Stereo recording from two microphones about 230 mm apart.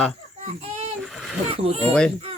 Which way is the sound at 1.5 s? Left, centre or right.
Right.